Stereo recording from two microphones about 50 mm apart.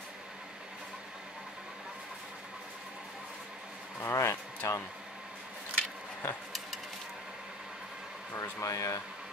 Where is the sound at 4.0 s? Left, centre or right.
Left.